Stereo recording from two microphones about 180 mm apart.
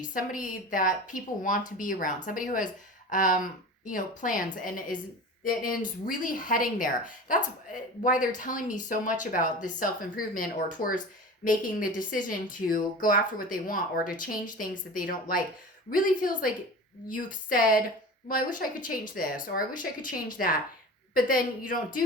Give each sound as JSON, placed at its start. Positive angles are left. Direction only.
{"t": 0.1, "sound": "speech", "side_deg": 50}